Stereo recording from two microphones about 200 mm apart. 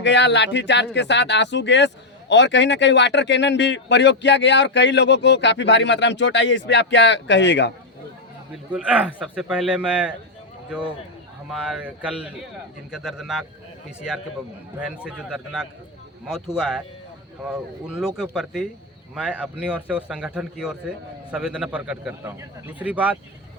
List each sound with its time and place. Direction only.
0.0 s speech: 60° left (ahead or behind)
8.5 s a man's voice: 5° right (ahead or behind)
15.0 s a man's voice: 5° right (ahead or behind)